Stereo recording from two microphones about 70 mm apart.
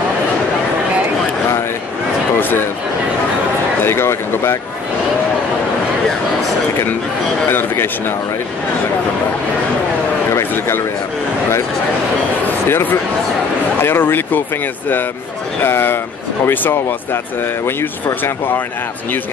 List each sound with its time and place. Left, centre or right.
3.8 s speech: left
7.4 s speech: left
12.6 s speech: left
15.6 s speech: left